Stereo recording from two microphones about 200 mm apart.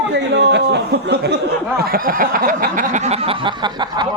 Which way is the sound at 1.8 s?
45° right (ahead or behind).